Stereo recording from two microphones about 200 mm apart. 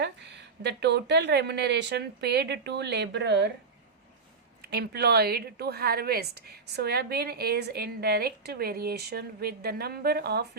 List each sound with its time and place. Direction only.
0.0 s speech: 60° right (ahead or behind)
4.6 s a woman's voice: 55° right (ahead or behind)